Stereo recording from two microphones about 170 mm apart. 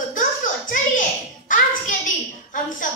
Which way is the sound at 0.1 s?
50° left (ahead or behind).